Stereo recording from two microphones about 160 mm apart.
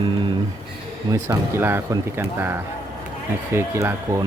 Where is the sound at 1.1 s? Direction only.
20° right (ahead or behind).